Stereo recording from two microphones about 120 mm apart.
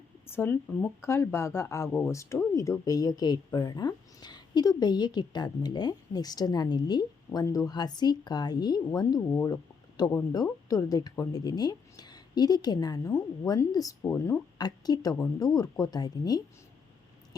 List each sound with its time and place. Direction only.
0.3 s a woman's voice: 20° left (ahead or behind)
14.1 s speech: 15° left (ahead or behind)
14.6 s a woman's voice: 35° left (ahead or behind)